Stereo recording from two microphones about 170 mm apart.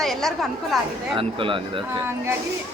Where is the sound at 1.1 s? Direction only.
30° right (ahead or behind).